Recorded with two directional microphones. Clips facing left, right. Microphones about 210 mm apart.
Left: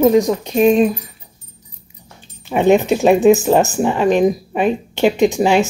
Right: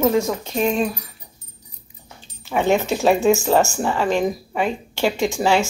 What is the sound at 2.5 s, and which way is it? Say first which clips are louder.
Speech: left 6 dB; 15° left (ahead or behind).